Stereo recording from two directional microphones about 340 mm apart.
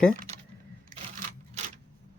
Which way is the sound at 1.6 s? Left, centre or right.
Centre.